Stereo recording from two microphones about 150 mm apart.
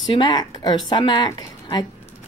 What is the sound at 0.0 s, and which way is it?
Speech, 30° left (ahead or behind).